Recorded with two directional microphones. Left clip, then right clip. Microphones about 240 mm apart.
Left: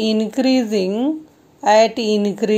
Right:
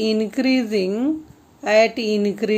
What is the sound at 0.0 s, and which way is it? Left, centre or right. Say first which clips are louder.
A woman's voice: left 2 dB; centre.